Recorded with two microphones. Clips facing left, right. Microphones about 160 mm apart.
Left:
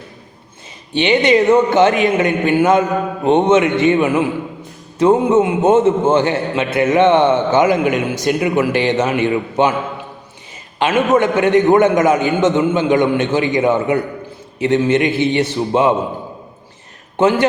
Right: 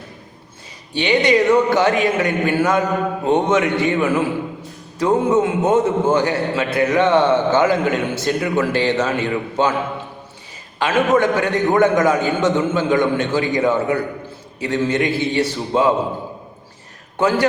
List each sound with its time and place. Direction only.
0.9 s a man's voice: 20° left (ahead or behind)
10.8 s a man's voice: 20° left (ahead or behind)
17.2 s a man's voice: 20° left (ahead or behind)